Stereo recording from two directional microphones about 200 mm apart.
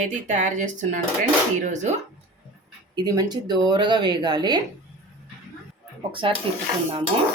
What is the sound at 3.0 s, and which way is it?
Speech, 20° right (ahead or behind).